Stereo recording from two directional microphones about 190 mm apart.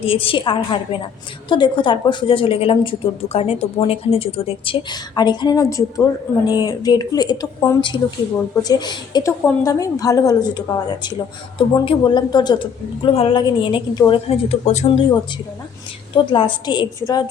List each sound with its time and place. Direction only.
0.0 s a woman's voice: 30° left (ahead or behind)